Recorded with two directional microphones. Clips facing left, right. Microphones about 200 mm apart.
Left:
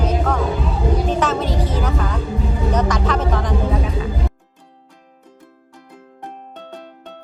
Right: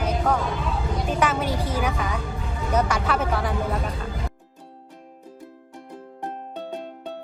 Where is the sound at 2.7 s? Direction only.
10° right (ahead or behind).